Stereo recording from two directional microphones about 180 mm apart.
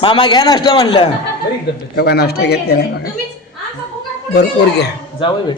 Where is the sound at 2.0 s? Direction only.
65° left (ahead or behind).